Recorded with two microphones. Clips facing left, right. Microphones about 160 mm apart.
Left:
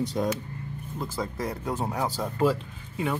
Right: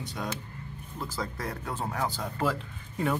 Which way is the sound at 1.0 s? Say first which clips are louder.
Left 3 dB; 15° left (ahead or behind).